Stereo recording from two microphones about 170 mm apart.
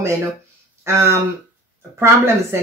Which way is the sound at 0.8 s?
15° right (ahead or behind).